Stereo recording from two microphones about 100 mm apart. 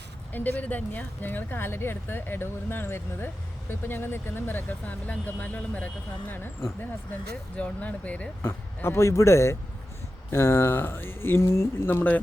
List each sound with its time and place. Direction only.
0.3 s speech: 15° left (ahead or behind)
7.5 s speech: 15° left (ahead or behind)
8.4 s speech: 25° left (ahead or behind)